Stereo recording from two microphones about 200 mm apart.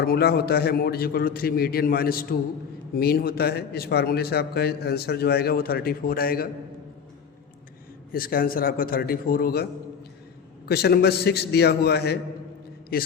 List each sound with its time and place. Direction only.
0.0 s a man's voice: 50° left (ahead or behind)
8.1 s a man's voice: 45° left (ahead or behind)
10.7 s a man's voice: 50° left (ahead or behind)